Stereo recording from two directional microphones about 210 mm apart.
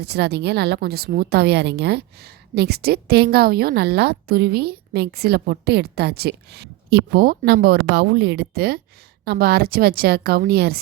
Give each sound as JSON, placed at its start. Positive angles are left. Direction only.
{"t": 0.0, "sound": "a woman's voice", "side_deg": -50}